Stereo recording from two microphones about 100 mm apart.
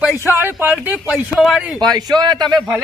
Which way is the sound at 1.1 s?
Centre (ahead or behind).